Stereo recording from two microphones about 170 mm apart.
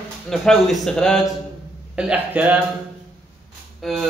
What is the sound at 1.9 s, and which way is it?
Speech, 5° right (ahead or behind).